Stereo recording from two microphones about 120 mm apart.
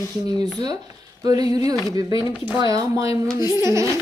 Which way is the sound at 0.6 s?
35° right (ahead or behind).